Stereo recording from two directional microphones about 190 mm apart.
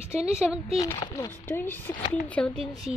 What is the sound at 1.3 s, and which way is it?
A woman's voice, 10° left (ahead or behind).